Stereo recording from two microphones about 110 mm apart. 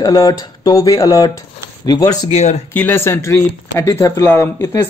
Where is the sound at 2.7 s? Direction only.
20° left (ahead or behind).